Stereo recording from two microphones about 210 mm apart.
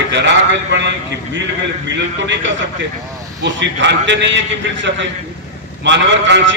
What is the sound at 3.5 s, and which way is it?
Speech, 60° right (ahead or behind).